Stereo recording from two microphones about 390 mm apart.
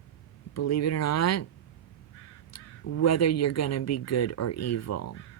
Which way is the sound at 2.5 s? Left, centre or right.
Left.